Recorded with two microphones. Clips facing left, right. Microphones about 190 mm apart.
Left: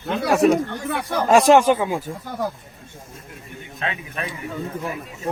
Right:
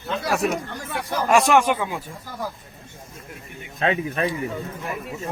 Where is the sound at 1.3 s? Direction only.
25° left (ahead or behind).